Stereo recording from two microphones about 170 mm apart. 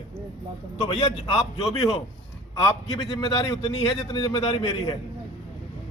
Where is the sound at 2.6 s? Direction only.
25° left (ahead or behind).